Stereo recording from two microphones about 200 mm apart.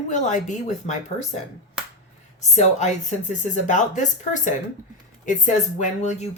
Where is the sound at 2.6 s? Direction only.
35° left (ahead or behind).